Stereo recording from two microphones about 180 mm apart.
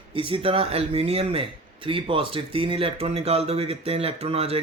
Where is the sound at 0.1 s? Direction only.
30° right (ahead or behind).